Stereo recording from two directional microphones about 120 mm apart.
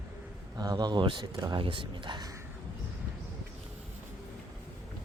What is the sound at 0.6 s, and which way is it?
Speech, 35° right (ahead or behind).